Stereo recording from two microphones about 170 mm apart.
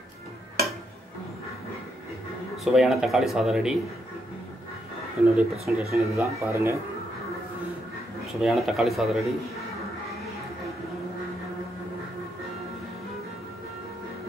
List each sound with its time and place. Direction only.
2.5 s speech: centre (ahead or behind)
5.3 s speech: 5° right (ahead or behind)
6.1 s speech: 15° right (ahead or behind)
8.4 s speech: centre (ahead or behind)